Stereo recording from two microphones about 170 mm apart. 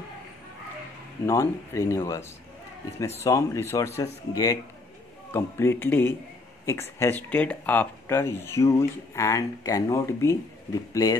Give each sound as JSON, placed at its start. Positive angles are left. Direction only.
{"t": 1.2, "sound": "speech", "side_deg": 15}